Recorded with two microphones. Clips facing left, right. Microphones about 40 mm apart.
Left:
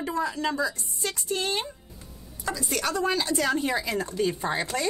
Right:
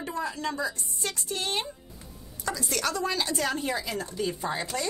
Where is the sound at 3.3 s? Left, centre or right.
Left.